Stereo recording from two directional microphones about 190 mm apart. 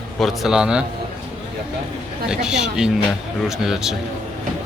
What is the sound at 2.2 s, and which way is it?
Speech, 5° right (ahead or behind).